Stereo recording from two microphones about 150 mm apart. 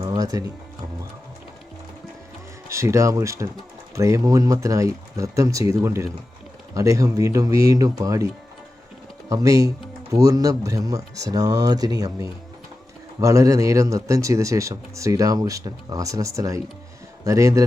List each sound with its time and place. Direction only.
0.1 s music: 25° right (ahead or behind)
2.6 s speech: 20° right (ahead or behind)
9.3 s speech: 20° right (ahead or behind)